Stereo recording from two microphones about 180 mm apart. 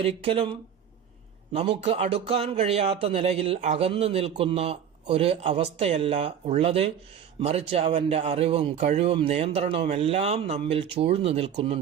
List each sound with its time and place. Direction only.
0.0 s speech: 30° right (ahead or behind)
1.5 s speech: 35° right (ahead or behind)